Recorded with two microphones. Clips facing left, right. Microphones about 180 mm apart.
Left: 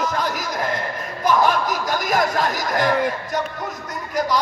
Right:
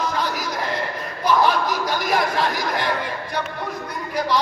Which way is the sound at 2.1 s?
45° left (ahead or behind).